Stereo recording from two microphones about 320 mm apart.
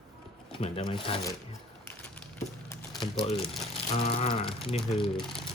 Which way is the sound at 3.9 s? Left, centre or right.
Centre.